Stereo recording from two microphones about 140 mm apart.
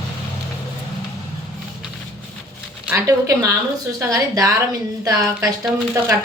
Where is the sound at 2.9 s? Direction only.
20° right (ahead or behind).